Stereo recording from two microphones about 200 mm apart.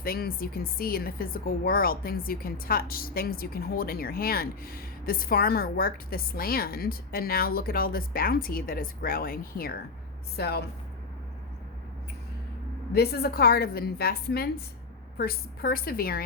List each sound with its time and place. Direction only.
0.0 s speech: 50° left (ahead or behind)
12.9 s speech: 50° left (ahead or behind)